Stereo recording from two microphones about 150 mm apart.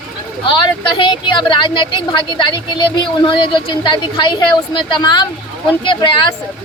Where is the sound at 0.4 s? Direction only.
35° left (ahead or behind).